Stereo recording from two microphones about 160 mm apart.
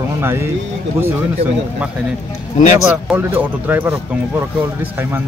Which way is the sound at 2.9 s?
10° right (ahead or behind).